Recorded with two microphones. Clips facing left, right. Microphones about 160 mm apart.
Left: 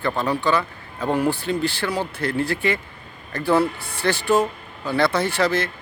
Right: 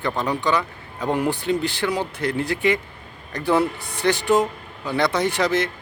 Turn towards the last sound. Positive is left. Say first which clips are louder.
# even
turn(degrees=-20)  # may be behind; listen again after turning